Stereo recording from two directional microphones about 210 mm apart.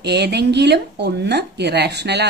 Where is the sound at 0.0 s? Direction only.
50° right (ahead or behind).